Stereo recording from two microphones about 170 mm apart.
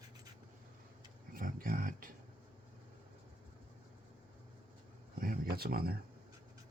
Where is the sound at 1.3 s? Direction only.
55° right (ahead or behind).